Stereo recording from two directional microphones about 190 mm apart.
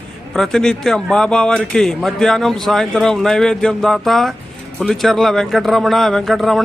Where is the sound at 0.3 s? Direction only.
Centre (ahead or behind).